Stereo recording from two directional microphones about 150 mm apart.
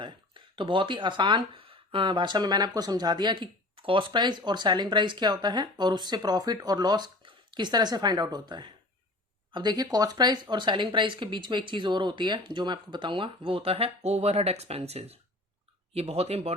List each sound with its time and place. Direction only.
0.0 s speech: 35° right (ahead or behind)